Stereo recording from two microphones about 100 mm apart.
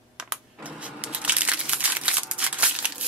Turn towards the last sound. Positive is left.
turn(degrees=-15)  # may be behind; listen again after turning